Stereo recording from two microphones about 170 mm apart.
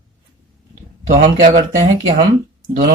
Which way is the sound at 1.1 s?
50° right (ahead or behind).